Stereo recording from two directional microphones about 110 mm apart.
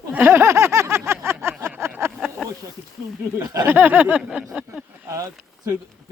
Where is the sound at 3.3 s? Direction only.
35° right (ahead or behind).